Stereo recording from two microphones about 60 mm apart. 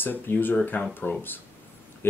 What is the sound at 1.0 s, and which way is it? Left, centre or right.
Speech, left.